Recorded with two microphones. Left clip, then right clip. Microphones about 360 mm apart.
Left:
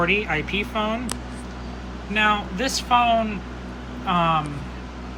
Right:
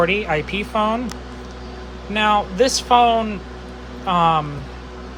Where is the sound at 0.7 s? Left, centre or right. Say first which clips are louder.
Right 6 dB; right.